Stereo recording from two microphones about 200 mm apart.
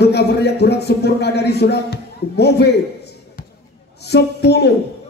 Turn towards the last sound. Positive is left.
turn(degrees=55)  # may be behind; listen again after turning